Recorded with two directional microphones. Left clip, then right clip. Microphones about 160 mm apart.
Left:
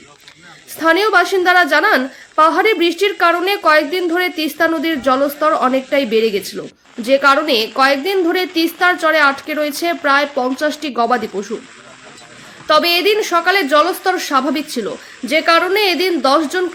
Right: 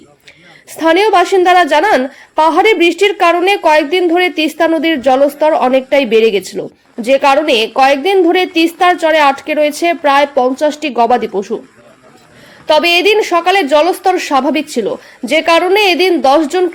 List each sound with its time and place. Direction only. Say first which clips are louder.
0.8 s a woman's voice: right 3 dB; 15° right (ahead or behind)
12.6 s a woman's voice: right 4 dB; 15° right (ahead or behind)